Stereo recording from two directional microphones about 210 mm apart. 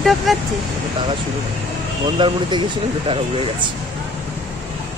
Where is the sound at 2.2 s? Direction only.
20° right (ahead or behind).